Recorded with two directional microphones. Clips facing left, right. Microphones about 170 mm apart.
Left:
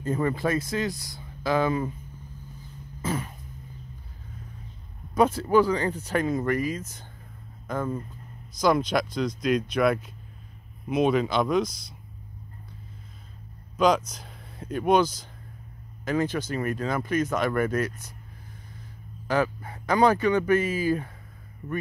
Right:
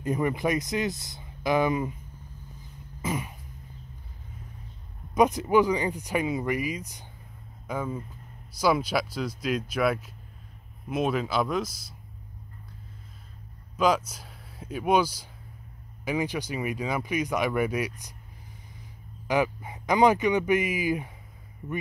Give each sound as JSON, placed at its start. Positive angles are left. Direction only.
{"t": 0.0, "sound": "speech", "side_deg": -15}
{"t": 3.0, "sound": "cough", "side_deg": -15}
{"t": 5.1, "sound": "speech", "side_deg": -15}
{"t": 13.7, "sound": "speech", "side_deg": -5}
{"t": 19.2, "sound": "speech", "side_deg": -15}